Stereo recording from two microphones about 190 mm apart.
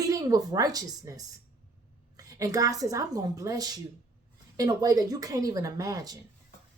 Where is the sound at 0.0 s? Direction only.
20° right (ahead or behind).